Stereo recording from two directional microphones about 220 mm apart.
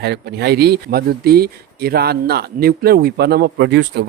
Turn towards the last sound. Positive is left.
turn(degrees=-50)  # may be behind; listen again after turning